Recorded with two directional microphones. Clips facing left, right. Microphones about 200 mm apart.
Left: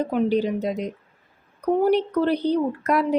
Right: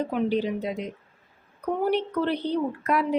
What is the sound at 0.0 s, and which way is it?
Speech, 40° left (ahead or behind).